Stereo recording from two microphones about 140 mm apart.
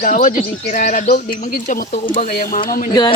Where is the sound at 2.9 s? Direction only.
30° left (ahead or behind).